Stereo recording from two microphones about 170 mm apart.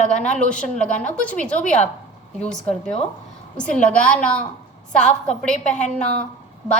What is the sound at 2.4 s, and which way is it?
A woman's voice, 5° left (ahead or behind).